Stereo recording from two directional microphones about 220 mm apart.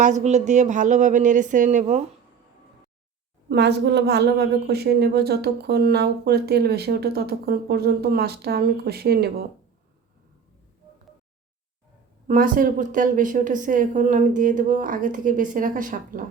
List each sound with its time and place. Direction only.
0.0 s a woman's voice: 30° right (ahead or behind)
3.5 s a woman's voice: 50° right (ahead or behind)
12.3 s a woman's voice: 40° right (ahead or behind)